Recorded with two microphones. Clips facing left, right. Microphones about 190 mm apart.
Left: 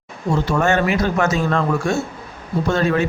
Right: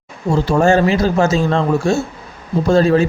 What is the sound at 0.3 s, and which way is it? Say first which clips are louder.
A man's voice: right 5 dB; 30° right (ahead or behind).